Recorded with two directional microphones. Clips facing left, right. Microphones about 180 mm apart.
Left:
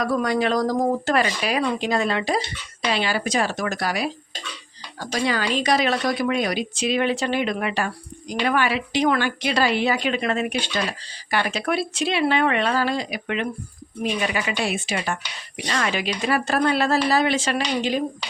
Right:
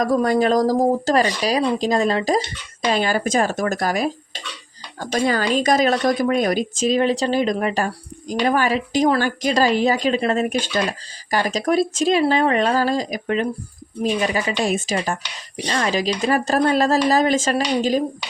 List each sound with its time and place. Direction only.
0.0 s speech: 40° right (ahead or behind)